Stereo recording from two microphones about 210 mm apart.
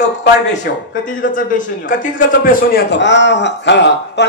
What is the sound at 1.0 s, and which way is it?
A man's voice, 40° left (ahead or behind).